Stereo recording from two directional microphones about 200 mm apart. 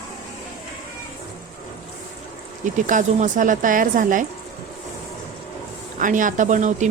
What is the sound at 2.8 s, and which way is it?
Speech, 40° right (ahead or behind).